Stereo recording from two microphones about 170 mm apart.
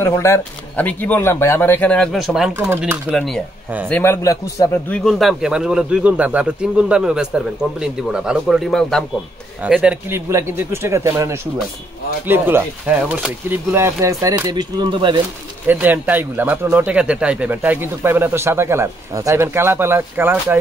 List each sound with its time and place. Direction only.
0.0 s speech: 15° left (ahead or behind); by 3.0 s 10° right (ahead or behind)
3.1 s a man's voice: 5° left (ahead or behind)
3.9 s speech: 15° left (ahead or behind)
4.9 s a man's voice: centre (ahead or behind); by 15.2 s 30° right (ahead or behind)
15.6 s speech: 10° right (ahead or behind)